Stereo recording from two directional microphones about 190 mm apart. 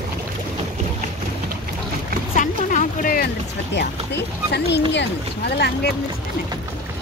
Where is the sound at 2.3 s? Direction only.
40° left (ahead or behind); by 3.9 s 55° left (ahead or behind).